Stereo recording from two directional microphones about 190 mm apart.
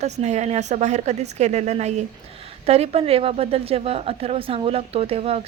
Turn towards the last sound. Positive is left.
turn(degrees=-30)  # may be behind; listen again after turning